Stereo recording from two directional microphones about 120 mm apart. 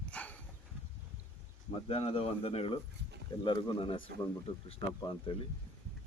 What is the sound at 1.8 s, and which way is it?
Speech, 55° left (ahead or behind).